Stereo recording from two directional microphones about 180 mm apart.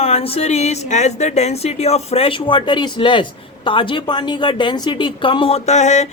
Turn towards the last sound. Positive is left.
turn(degrees=40)  # may be behind; listen again after turning